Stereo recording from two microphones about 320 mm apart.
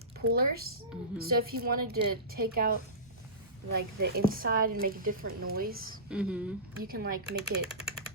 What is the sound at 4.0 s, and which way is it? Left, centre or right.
A woman's voice, right.